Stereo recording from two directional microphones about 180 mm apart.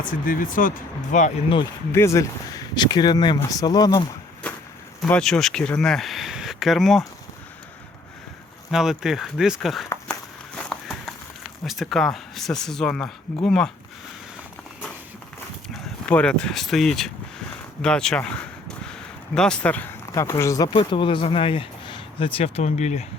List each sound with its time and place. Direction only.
0.1 s speech: 50° left (ahead or behind)
1.9 s speech: 15° left (ahead or behind)
4.4 s a sound: 5° left (ahead or behind)
5.0 s speech: 5° left (ahead or behind)
8.7 s speech: centre (ahead or behind)
10.7 s a sound: centre (ahead or behind)
11.6 s speech: centre (ahead or behind)
15.7 s speech: 5° left (ahead or behind); by 23.0 s 40° left (ahead or behind)